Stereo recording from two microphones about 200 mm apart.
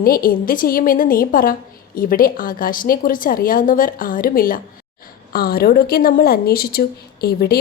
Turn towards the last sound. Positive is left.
turn(degrees=50)  # may be behind; listen again after turning